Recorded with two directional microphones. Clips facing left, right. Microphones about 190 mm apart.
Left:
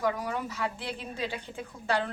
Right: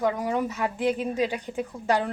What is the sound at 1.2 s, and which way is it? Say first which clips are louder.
Speech: right 8 dB; 15° right (ahead or behind).